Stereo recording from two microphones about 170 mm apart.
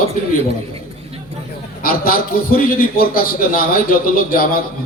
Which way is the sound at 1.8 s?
55° left (ahead or behind).